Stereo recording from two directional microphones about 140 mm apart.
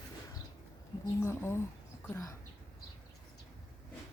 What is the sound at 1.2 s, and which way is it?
Speech, 20° left (ahead or behind).